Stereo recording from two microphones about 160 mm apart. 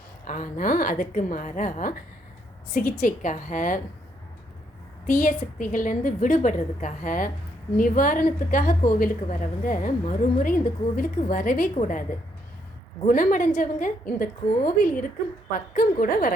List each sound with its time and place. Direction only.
0.3 s a woman's voice: 55° left (ahead or behind)
5.0 s a woman's voice: 55° left (ahead or behind)
13.1 s a woman's voice: 60° left (ahead or behind)